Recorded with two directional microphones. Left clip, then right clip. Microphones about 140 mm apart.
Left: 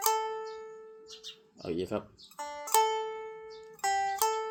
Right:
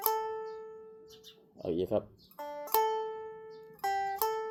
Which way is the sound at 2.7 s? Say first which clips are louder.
Left 3 dB; 30° right (ahead or behind).